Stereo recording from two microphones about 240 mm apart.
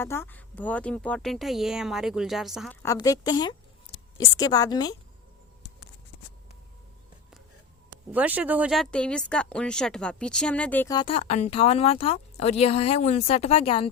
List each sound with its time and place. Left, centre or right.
0.0 s speech: centre
2.8 s a woman's voice: centre
8.1 s speech: centre; by 13.9 s left